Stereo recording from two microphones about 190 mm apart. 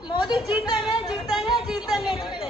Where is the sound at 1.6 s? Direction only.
Centre (ahead or behind).